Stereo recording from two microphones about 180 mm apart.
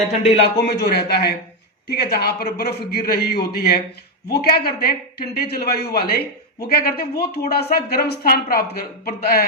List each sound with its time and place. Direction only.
0.6 s a man's voice: 60° left (ahead or behind)